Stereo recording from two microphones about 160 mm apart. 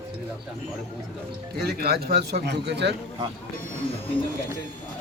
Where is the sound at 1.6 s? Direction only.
80° right.